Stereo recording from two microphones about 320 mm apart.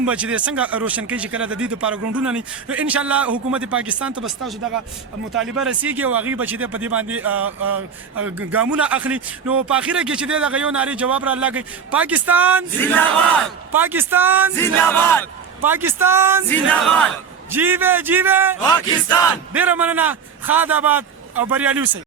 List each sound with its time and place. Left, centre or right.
0.0 s a man's voice: centre
5.3 s a man's voice: centre
7.0 s speech: right
7.3 s a man's voice: centre
7.6 s a sound: right
8.4 s a man's voice: centre
12.8 s a man's voice: centre
13.7 s a man's voice: centre
14.6 s battle cry: centre
15.6 s a man's voice: centre
16.5 s a man's voice: centre
18.6 s battle cry: centre
19.5 s a man's voice: centre